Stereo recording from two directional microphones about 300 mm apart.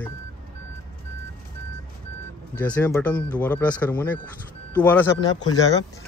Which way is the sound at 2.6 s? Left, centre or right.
Centre.